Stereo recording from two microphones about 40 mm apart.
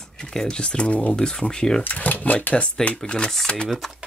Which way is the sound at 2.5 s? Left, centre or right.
Left.